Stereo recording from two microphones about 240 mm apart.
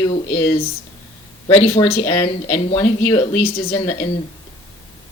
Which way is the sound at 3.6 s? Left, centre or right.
Left.